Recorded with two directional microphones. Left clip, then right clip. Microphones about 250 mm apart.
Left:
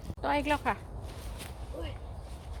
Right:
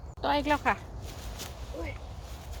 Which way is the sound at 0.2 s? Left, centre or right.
Centre.